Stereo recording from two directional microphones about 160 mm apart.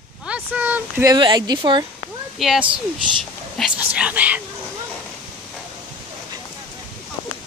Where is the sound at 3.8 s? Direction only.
10° right (ahead or behind).